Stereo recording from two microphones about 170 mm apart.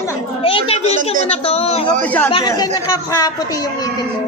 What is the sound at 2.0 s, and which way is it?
Speech, 10° left (ahead or behind).